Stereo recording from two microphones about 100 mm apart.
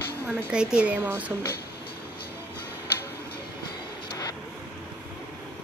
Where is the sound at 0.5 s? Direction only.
10° right (ahead or behind).